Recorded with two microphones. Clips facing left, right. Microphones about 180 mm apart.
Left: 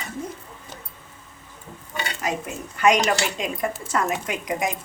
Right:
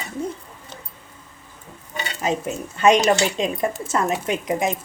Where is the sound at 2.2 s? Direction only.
25° right (ahead or behind).